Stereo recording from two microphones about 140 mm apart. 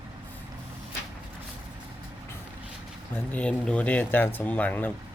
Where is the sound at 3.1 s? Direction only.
10° left (ahead or behind).